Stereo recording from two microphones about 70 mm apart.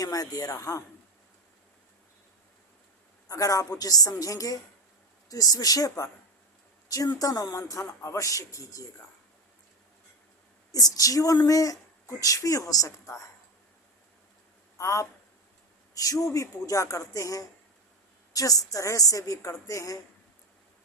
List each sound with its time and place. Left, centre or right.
0.0 s a woman's voice: left
3.2 s a woman's voice: left
10.7 s a woman's voice: left
14.8 s speech: left